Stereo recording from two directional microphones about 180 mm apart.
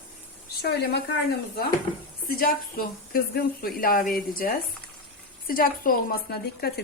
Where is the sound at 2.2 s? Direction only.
55° left (ahead or behind).